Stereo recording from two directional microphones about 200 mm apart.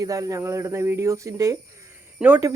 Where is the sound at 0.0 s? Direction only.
15° right (ahead or behind).